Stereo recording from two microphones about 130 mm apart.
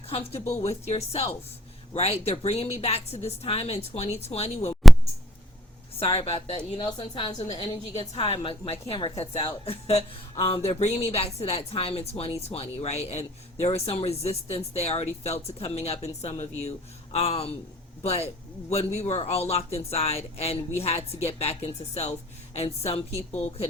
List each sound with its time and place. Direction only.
0.1 s speech: 50° left (ahead or behind)
6.0 s speech: 50° left (ahead or behind)
7.9 s speech: 55° left (ahead or behind)